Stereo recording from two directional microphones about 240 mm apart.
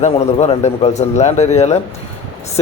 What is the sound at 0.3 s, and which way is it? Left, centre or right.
A man's voice, left.